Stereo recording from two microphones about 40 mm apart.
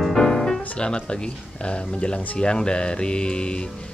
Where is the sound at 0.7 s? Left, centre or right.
Left.